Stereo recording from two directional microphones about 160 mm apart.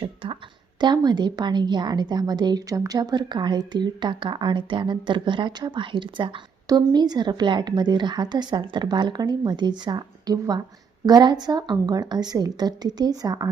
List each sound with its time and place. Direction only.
0.0 s a woman's voice: 35° right (ahead or behind)